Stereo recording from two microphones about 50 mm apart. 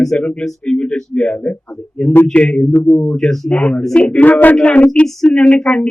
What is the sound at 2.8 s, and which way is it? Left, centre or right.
Speech, left.